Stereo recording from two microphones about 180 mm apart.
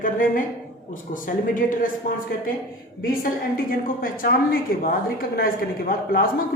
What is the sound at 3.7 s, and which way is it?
A woman's voice, 50° left (ahead or behind).